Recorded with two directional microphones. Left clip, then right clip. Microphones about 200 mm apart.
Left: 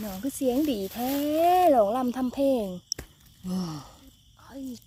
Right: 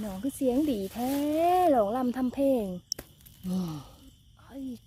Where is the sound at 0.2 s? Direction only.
5° left (ahead or behind).